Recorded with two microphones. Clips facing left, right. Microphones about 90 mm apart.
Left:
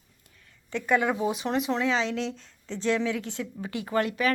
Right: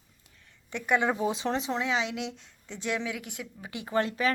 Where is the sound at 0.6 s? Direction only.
20° right (ahead or behind).